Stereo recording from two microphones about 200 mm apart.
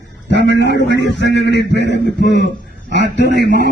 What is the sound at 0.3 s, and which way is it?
A man's voice, 60° left (ahead or behind).